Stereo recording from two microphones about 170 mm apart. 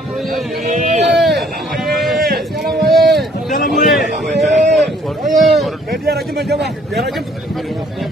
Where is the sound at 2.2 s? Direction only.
65° right (ahead or behind).